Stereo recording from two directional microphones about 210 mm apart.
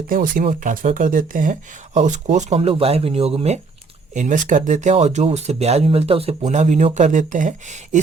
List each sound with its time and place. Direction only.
0.1 s speech: 40° right (ahead or behind)